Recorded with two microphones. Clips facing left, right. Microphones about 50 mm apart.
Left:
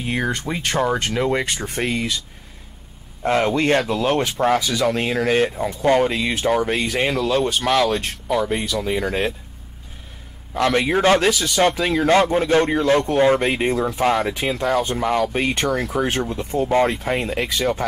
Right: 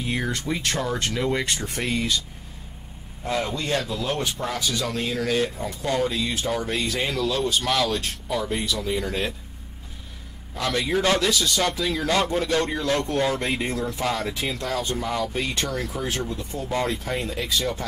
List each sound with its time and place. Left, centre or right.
0.0 s speech: left
3.2 s speech: left
5.7 s speech: left
5.9 s speech: left
7.6 s speech: left
10.5 s speech: left
16.6 s speech: left